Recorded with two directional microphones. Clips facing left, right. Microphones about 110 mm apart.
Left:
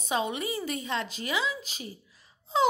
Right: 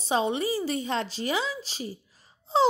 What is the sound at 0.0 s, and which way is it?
A woman's voice, 30° right (ahead or behind).